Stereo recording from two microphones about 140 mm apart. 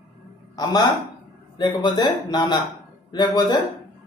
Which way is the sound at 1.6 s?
35° left (ahead or behind).